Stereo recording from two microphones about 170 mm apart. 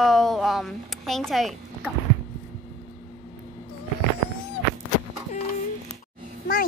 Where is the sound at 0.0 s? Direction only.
Centre (ahead or behind).